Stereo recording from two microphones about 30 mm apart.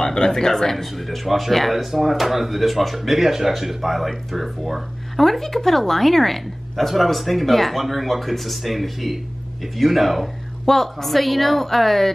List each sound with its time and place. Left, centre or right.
0.0 s speech: left
0.9 s speech: centre